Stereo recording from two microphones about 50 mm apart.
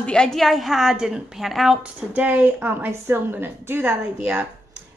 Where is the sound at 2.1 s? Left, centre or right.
Right.